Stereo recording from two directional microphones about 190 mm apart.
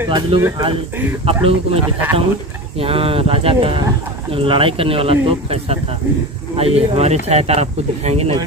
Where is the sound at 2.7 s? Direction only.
30° right (ahead or behind).